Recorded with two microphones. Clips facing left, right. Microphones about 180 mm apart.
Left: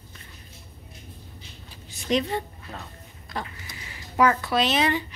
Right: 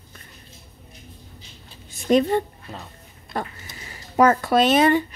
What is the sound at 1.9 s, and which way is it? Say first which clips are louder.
A woman's voice: right 7 dB; 50° right (ahead or behind).